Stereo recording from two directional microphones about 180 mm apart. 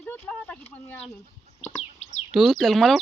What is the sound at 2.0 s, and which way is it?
Bird, 35° left (ahead or behind).